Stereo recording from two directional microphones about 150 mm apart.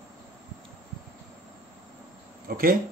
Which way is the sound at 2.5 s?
80° right.